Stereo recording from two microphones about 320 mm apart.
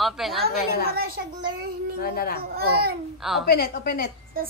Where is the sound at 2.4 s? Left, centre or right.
Right.